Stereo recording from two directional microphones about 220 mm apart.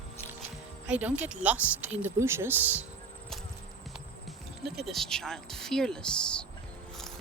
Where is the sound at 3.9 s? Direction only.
Centre (ahead or behind).